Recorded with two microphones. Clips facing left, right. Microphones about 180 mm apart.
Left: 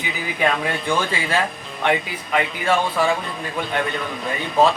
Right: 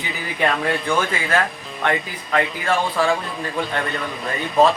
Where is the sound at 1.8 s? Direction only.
15° left (ahead or behind).